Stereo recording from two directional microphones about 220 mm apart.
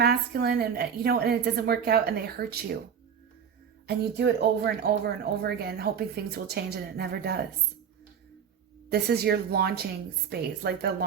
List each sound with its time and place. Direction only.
0.0 s speech: 45° right (ahead or behind)
3.8 s speech: 45° right (ahead or behind)
8.9 s speech: 45° right (ahead or behind)